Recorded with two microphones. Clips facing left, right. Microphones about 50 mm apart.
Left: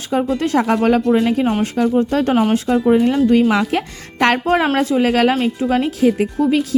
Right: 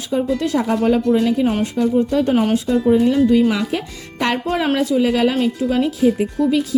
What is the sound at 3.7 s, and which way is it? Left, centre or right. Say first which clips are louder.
Speech: left 3 dB; left.